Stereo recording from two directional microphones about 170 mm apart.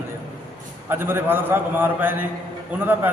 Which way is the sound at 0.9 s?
15° right (ahead or behind).